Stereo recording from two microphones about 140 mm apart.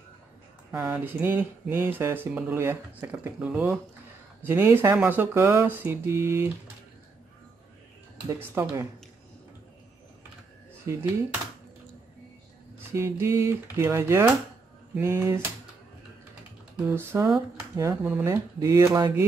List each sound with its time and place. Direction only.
0.7 s speech: 15° right (ahead or behind)
8.3 s speech: 20° right (ahead or behind)
10.9 s speech: 20° right (ahead or behind)
12.9 s speech: 20° right (ahead or behind)
16.8 s speech: 15° right (ahead or behind)